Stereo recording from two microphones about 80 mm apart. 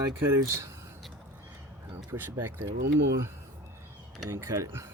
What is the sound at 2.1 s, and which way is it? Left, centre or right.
Speech, right.